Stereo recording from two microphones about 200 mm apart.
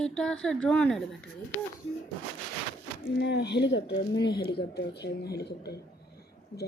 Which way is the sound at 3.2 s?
60° left (ahead or behind).